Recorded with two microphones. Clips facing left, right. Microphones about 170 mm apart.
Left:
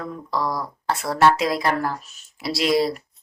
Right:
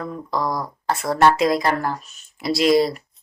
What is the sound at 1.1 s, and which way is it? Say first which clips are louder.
Speech: right 2 dB; centre (ahead or behind).